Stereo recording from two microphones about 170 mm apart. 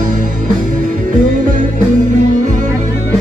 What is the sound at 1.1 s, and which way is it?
Music, 50° right (ahead or behind).